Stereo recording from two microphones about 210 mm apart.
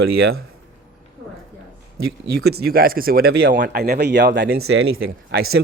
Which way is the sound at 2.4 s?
50° right (ahead or behind).